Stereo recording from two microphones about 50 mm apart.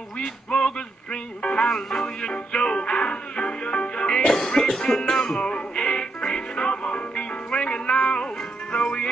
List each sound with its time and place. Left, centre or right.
0.2 s music: centre